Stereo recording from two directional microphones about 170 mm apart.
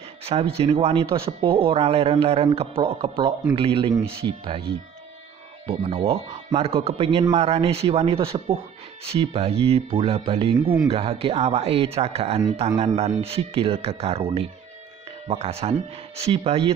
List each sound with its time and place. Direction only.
0.2 s speech: 35° right (ahead or behind)
5.7 s speech: 35° right (ahead or behind)